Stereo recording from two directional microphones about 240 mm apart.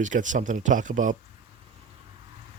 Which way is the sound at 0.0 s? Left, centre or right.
Right.